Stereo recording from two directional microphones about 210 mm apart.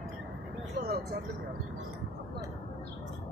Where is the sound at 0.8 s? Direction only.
45° right (ahead or behind).